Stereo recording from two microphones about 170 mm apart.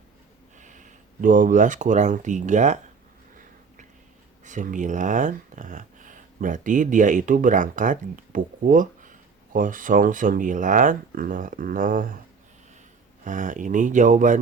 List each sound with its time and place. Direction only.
0.6 s speech: 50° right (ahead or behind)
4.4 s speech: 50° right (ahead or behind)
13.2 s speech: 50° right (ahead or behind)